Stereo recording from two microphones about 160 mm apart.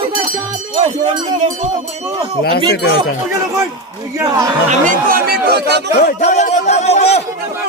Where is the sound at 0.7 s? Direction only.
30° right (ahead or behind).